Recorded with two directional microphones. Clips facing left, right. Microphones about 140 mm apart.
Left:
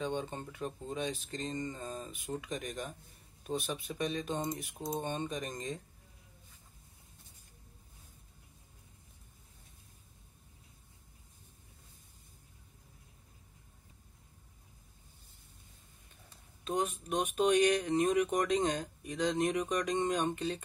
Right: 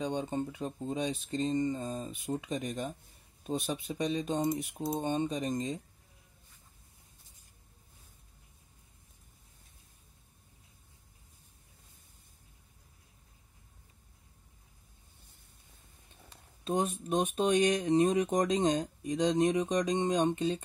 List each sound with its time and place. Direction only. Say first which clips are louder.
0.0 s speech: right 4 dB; 15° right (ahead or behind)
16.6 s speech: right 3 dB; 30° right (ahead or behind)